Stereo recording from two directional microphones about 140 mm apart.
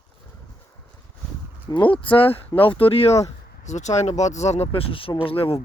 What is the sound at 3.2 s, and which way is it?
Speech, 55° left (ahead or behind).